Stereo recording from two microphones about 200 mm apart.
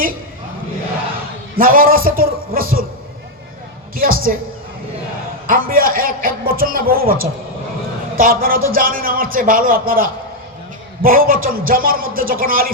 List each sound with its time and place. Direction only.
1.5 s a man's voice: 45° right (ahead or behind)
3.9 s a man's voice: 45° right (ahead or behind)
5.5 s a man's voice: 45° right (ahead or behind)